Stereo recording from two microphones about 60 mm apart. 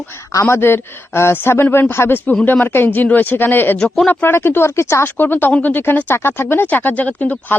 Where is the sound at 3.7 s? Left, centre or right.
Centre.